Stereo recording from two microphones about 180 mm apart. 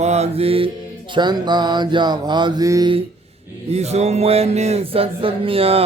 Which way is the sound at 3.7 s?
35° right (ahead or behind).